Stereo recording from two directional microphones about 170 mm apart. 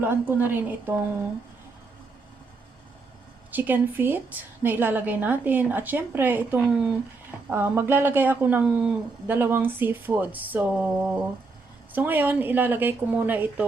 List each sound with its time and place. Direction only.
0.0 s a woman's voice: 10° right (ahead or behind)
3.5 s a woman's voice: 10° right (ahead or behind)